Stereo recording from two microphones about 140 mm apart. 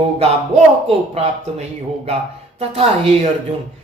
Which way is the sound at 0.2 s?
50° right (ahead or behind).